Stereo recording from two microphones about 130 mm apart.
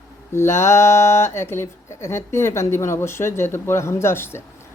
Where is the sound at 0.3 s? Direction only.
20° left (ahead or behind).